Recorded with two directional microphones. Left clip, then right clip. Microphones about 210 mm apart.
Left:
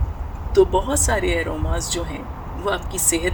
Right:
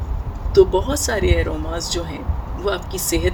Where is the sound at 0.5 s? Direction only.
10° right (ahead or behind).